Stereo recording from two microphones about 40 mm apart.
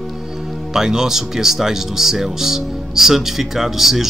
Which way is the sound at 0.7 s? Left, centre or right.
Centre.